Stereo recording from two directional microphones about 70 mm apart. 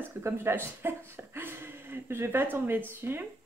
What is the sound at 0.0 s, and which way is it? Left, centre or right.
Speech, right.